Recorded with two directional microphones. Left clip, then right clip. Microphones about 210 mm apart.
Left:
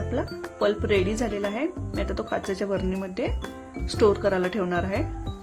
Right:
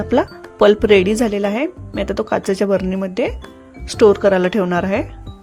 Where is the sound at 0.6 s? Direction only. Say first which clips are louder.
Right 12 dB; 40° right (ahead or behind).